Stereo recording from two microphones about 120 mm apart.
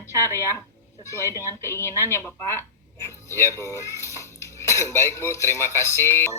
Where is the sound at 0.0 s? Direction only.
25° left (ahead or behind).